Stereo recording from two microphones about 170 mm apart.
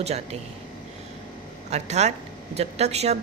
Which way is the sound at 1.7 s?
40° right (ahead or behind).